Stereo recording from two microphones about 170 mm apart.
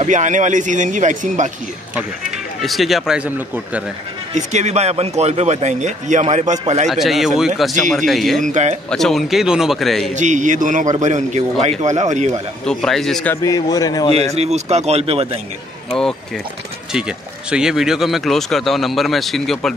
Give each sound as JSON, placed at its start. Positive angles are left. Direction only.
{"t": 0.0, "sound": "a man's voice", "side_deg": -45}
{"t": 2.0, "sound": "speech", "side_deg": 0}
{"t": 4.3, "sound": "speech", "side_deg": -45}
{"t": 6.9, "sound": "speech", "side_deg": 0}
{"t": 8.5, "sound": "a man's voice", "side_deg": -45}
{"t": 8.9, "sound": "speech", "side_deg": 0}
{"t": 10.1, "sound": "a man's voice", "side_deg": -45}
{"t": 12.6, "sound": "a man's voice", "side_deg": 0}
{"t": 14.1, "sound": "speech", "side_deg": -40}
{"t": 15.9, "sound": "speech", "side_deg": 5}